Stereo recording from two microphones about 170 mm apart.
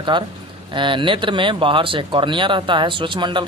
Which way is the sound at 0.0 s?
25° right (ahead or behind).